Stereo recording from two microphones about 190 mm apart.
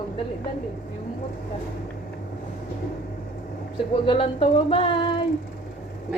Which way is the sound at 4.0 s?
25° left (ahead or behind).